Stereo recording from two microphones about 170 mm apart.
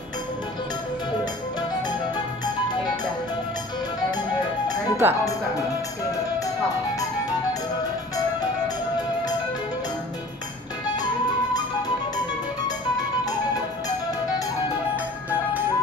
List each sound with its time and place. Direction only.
5.0 s speech: 10° right (ahead or behind)